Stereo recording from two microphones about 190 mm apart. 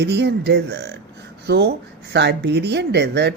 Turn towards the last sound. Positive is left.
turn(degrees=-65)  # may be behind; listen again after turning